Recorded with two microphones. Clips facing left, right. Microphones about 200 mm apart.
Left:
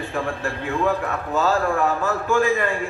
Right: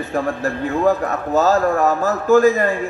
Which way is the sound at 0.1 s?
40° right (ahead or behind).